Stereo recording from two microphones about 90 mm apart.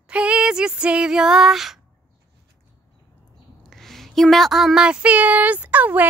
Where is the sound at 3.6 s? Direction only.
5° left (ahead or behind).